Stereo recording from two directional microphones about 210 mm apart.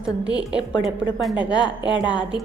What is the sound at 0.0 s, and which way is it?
A woman's voice, 5° right (ahead or behind).